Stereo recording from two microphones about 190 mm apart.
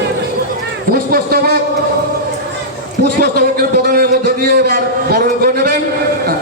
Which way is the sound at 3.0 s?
55° right (ahead or behind).